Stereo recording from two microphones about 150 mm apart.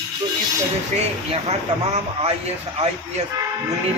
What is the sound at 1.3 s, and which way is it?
Speech, 45° right (ahead or behind).